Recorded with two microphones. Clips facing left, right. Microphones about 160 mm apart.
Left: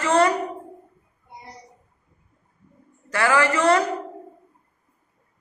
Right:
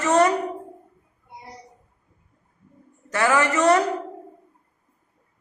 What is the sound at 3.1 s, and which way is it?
Speech, 20° right (ahead or behind).